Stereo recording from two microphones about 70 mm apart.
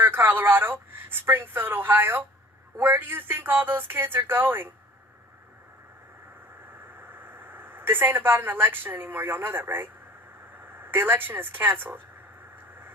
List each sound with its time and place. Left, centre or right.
0.0 s speech: right
7.0 s speech: right